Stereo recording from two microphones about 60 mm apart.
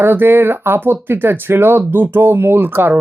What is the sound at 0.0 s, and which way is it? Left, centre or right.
Speech, right.